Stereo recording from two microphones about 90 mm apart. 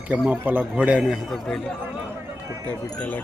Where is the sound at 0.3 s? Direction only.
20° right (ahead or behind); by 1.4 s 5° right (ahead or behind).